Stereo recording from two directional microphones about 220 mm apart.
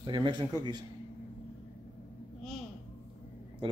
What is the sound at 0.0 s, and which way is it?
Speech, 20° right (ahead or behind).